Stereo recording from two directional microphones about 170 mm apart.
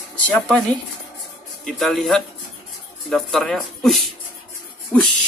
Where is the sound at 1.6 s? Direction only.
Centre (ahead or behind).